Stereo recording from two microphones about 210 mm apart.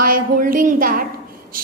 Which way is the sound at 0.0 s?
40° right (ahead or behind).